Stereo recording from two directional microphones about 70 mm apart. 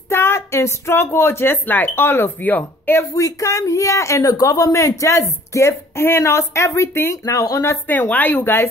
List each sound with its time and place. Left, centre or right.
0.1 s speech: left
3.0 s speech: left
7.1 s speech: left
7.6 s speech: left
7.9 s speech: left